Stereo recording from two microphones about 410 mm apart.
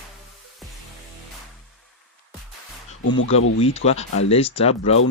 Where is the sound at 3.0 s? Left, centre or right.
Left.